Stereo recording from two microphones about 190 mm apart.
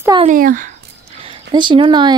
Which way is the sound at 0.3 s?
45° right (ahead or behind).